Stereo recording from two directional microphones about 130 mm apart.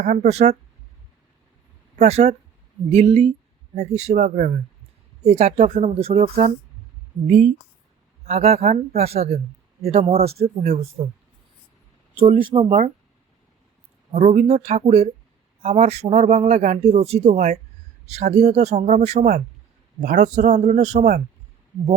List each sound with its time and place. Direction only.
0.0 s speech: 60° right (ahead or behind)
2.0 s speech: 55° right (ahead or behind)
8.3 s speech: 55° right (ahead or behind)
12.4 s speech: 40° right (ahead or behind)
14.1 s speech: 65° right (ahead or behind)